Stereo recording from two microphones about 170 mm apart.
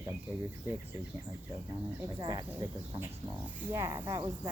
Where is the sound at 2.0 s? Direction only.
25° right (ahead or behind).